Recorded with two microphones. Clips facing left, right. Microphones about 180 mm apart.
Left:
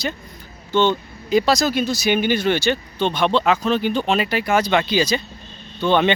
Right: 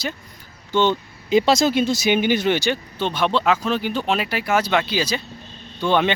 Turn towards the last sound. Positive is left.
turn(degrees=-10)  # may be behind; listen again after turning